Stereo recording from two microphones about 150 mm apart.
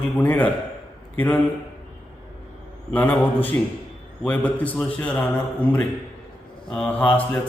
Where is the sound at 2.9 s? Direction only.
10° left (ahead or behind).